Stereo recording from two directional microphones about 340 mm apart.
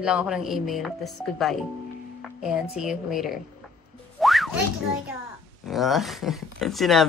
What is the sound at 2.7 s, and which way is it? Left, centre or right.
Speech, centre.